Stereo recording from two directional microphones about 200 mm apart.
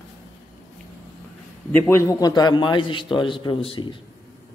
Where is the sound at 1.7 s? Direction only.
10° left (ahead or behind); by 3.9 s 25° left (ahead or behind).